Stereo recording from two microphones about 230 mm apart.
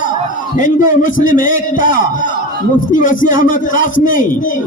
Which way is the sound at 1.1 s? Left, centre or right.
Left.